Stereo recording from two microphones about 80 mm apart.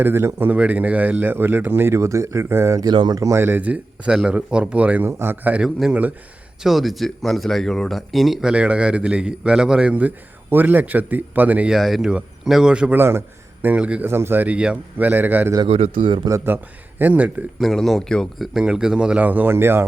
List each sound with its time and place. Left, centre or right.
0.0 s speech: right
0.5 s speech: centre
2.9 s speech: right
3.2 s speech: right
3.4 s speech: right
6.6 s speech: centre
11.7 s speech: centre
13.0 s a man's voice: right; by 14.1 s centre
14.1 s speech: right
15.6 s a man's voice: right
17.0 s speech: centre
17.6 s speech: centre
18.5 s speech: centre; by 19.8 s right